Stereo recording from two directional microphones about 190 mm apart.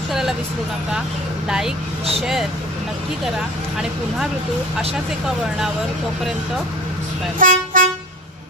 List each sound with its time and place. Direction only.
0.1 s vehicle: centre (ahead or behind)
1.5 s speech: 5° right (ahead or behind)
7.3 s vehicle: 45° right (ahead or behind)